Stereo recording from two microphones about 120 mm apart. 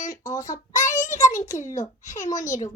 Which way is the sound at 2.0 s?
90° left.